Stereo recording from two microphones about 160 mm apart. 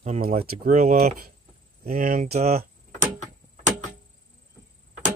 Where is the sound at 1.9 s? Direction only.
55° right (ahead or behind).